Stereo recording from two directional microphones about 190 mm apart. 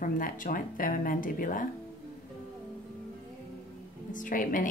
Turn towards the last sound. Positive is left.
turn(degrees=45)  # may be behind; listen again after turning